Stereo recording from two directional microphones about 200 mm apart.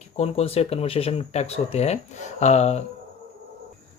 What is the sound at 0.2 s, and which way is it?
Speech, 30° left (ahead or behind).